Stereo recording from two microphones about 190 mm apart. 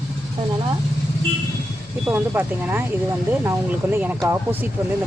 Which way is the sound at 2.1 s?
10° right (ahead or behind).